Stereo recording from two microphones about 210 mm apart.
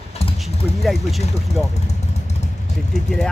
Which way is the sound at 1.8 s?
30° left (ahead or behind).